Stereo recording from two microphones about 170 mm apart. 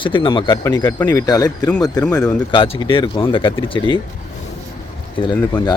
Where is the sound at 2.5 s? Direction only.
30° left (ahead or behind).